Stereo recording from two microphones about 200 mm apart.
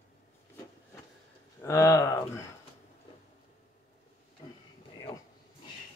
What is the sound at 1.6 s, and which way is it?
Speech, 15° left (ahead or behind).